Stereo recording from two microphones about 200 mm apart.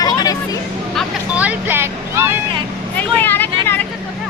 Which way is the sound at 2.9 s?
10° left (ahead or behind).